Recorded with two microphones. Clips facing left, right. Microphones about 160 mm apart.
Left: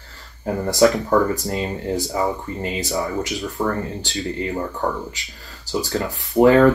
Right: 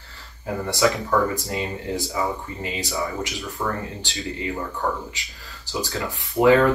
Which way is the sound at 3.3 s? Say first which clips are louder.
Left 5 dB; 40° left (ahead or behind).